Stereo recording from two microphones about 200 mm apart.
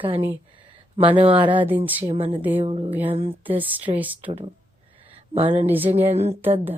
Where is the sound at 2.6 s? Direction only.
30° right (ahead or behind).